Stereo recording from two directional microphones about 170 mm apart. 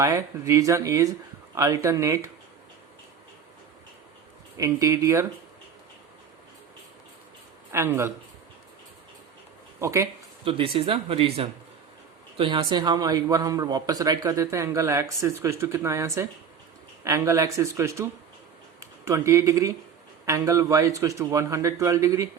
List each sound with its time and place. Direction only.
0.0 s a man's voice: 20° right (ahead or behind)
4.5 s a man's voice: 20° right (ahead or behind)
7.7 s a man's voice: 15° right (ahead or behind)
9.8 s a man's voice: 15° right (ahead or behind)
10.4 s a man's voice: 30° right (ahead or behind)
19.0 s a man's voice: 15° right (ahead or behind)